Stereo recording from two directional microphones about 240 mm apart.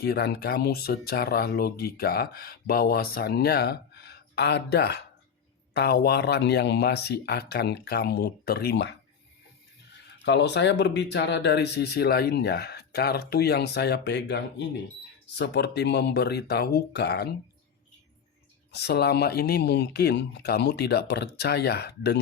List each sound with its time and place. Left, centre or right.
0.0 s speech: left
10.2 s speech: left
18.7 s speech: left